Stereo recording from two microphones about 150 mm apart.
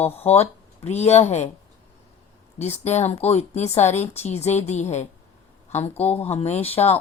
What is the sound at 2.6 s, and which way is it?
Speech, 45° left (ahead or behind).